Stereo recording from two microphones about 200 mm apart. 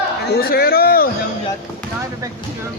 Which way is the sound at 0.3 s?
50° left (ahead or behind).